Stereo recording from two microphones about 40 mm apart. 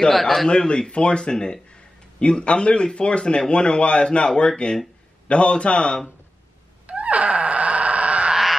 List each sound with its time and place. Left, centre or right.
0.1 s a man's voice: centre
0.5 s speech: left
6.9 s cat: right